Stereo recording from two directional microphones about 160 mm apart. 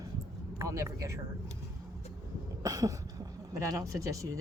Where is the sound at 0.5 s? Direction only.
20° right (ahead or behind).